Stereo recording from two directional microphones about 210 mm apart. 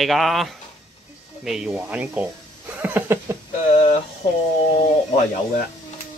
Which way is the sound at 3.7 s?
30° left (ahead or behind).